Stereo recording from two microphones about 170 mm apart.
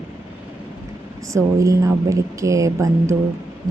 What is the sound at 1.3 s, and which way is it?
Speech, 20° right (ahead or behind).